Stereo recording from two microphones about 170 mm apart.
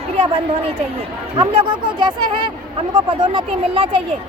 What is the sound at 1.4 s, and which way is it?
Speech, 30° right (ahead or behind).